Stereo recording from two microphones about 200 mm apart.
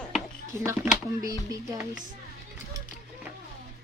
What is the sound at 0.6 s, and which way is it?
Speech, 10° right (ahead or behind).